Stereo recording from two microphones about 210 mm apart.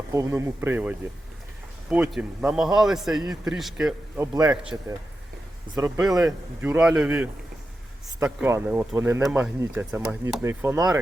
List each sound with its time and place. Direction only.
0.1 s speech: 15° right (ahead or behind)
4.2 s speech: 20° right (ahead or behind)
4.4 s speech: 5° right (ahead or behind)
6.6 s speech: 5° right (ahead or behind)